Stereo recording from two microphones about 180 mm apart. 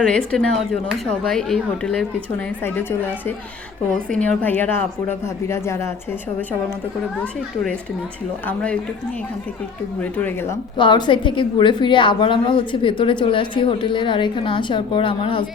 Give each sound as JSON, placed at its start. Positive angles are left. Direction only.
{"t": 0.0, "sound": "speech", "side_deg": 5}
{"t": 4.1, "sound": "a woman's voice", "side_deg": 5}
{"t": 8.4, "sound": "a woman's voice", "side_deg": 5}
{"t": 10.0, "sound": "a woman's voice", "side_deg": 10}
{"t": 10.8, "sound": "a woman's voice", "side_deg": 25}